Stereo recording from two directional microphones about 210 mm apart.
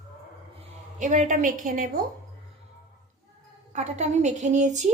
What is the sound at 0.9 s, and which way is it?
Speech, 35° right (ahead or behind).